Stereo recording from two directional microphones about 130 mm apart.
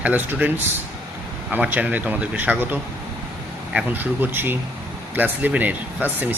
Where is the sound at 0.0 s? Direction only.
15° right (ahead or behind).